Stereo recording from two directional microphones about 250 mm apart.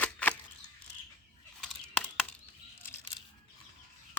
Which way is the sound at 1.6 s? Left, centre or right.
Centre.